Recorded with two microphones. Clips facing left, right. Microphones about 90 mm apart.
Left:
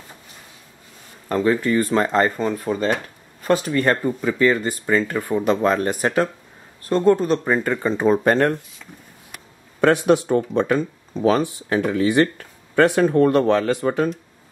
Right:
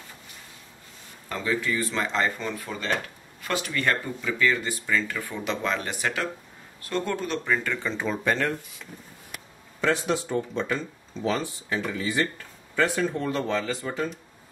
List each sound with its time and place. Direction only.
1.3 s speech: 45° left (ahead or behind)
9.8 s speech: 60° left (ahead or behind)